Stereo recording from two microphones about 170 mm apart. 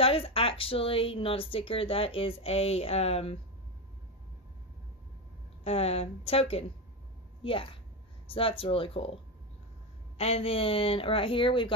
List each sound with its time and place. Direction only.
0.0 s speech: 35° left (ahead or behind)
5.6 s speech: 35° left (ahead or behind)
10.1 s speech: 35° left (ahead or behind)